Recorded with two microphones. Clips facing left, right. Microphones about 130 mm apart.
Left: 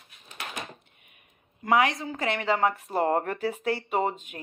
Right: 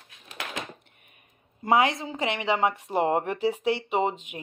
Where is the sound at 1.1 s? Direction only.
35° right (ahead or behind).